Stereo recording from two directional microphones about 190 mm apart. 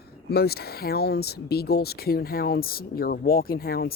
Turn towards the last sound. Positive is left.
turn(degrees=50)  # may be behind; listen again after turning